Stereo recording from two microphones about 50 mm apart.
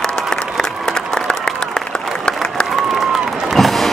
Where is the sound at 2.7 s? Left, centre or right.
Centre.